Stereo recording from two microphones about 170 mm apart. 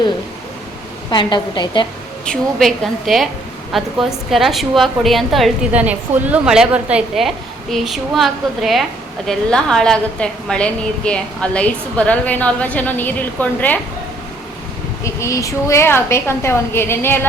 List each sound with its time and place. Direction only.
1.1 s a woman's voice: 25° left (ahead or behind)
2.2 s a woman's voice: 5° left (ahead or behind)
15.0 s a woman's voice: 20° left (ahead or behind)